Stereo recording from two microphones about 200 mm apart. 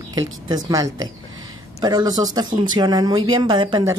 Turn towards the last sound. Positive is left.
turn(degrees=-20)  # may be behind; listen again after turning